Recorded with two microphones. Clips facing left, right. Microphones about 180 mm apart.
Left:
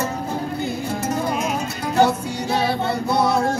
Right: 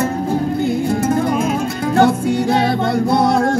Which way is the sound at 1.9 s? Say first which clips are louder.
Right 4 dB; 60° right (ahead or behind).